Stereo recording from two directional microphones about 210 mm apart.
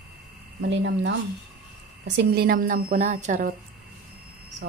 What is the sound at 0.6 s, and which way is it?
A woman's voice, 60° right (ahead or behind).